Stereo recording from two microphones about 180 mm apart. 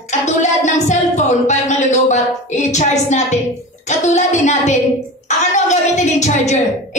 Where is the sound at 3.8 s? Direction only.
40° left (ahead or behind).